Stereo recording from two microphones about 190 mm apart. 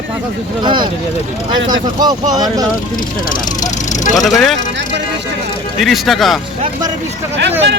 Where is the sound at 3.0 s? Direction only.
45° left (ahead or behind).